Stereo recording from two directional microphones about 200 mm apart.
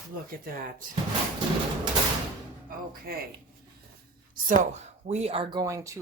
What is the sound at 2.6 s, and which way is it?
Speech, 45° right (ahead or behind).